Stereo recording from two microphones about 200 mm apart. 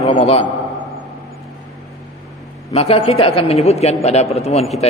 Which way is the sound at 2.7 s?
30° left (ahead or behind).